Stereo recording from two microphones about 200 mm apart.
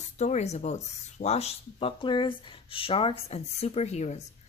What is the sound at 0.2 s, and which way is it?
A woman's voice, 35° left (ahead or behind).